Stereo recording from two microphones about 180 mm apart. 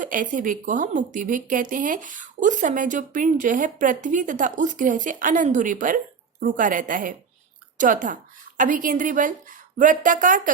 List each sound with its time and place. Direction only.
0.0 s speech: 45° right (ahead or behind)